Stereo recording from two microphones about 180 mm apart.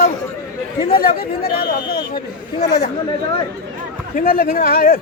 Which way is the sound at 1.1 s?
55° left (ahead or behind).